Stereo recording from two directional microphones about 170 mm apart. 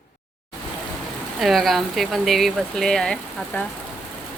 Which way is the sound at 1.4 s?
Centre (ahead or behind).